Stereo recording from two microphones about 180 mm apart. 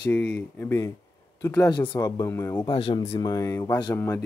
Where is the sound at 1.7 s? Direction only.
25° left (ahead or behind).